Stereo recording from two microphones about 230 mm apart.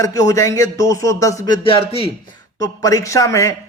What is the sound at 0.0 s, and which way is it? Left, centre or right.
A man's voice, centre.